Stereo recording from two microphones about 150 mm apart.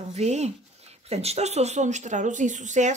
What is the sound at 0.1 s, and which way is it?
A woman's voice, 50° right (ahead or behind).